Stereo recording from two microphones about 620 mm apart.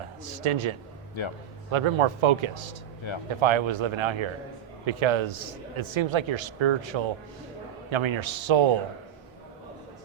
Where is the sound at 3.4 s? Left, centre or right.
Right.